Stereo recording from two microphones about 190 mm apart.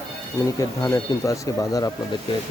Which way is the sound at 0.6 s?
15° left (ahead or behind).